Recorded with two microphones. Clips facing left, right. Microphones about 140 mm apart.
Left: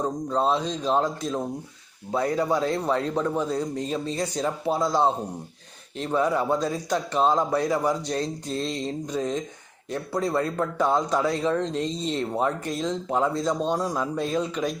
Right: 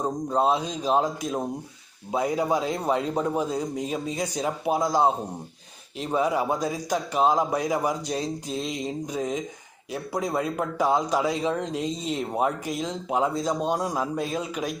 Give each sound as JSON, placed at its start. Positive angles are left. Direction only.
{"t": 0.0, "sound": "a man's voice", "side_deg": -10}